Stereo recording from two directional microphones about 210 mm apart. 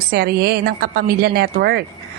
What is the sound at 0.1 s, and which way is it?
A woman's voice, 50° right (ahead or behind).